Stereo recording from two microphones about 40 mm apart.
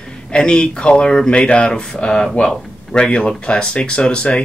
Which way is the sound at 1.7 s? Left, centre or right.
Centre.